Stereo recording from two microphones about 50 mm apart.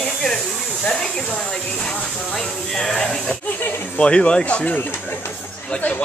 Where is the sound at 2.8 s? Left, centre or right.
Centre; by 4.8 s left.